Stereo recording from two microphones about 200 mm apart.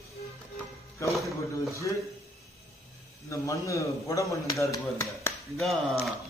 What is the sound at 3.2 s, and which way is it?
A man's voice, 15° left (ahead or behind).